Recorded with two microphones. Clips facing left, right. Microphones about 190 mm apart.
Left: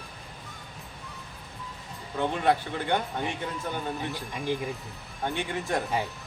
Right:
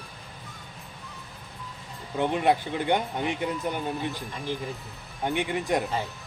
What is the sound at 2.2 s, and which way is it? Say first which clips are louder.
Speech: right 2 dB; 15° right (ahead or behind).